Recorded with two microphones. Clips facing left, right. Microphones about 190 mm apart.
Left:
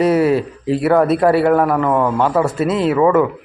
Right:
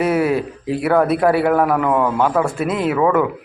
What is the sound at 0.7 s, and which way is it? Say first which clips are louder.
Speech: left 2 dB; centre (ahead or behind).